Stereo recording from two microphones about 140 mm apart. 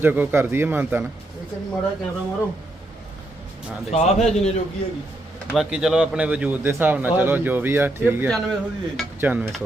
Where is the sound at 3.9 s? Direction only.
50° left (ahead or behind).